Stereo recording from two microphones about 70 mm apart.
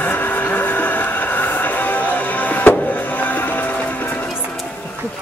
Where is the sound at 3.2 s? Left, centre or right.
Left.